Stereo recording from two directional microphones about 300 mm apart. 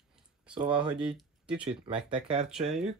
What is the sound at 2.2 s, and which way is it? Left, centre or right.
Speech, right.